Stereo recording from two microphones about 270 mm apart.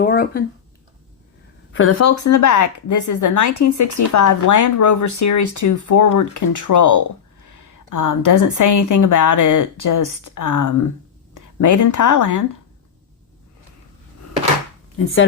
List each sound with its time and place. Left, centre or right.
0.0 s a sound: left
1.9 s a woman's voice: left
14.9 s speech: left